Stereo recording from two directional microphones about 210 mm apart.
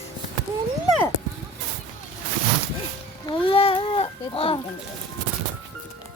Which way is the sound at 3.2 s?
25° left (ahead or behind).